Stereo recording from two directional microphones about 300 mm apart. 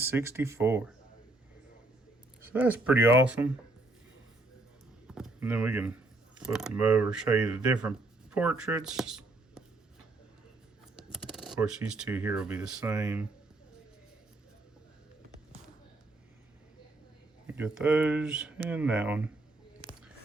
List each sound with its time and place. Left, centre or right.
0.0 s speech: centre
2.4 s speech: centre
5.0 s speech: centre
11.1 s speech: centre
17.4 s speech: centre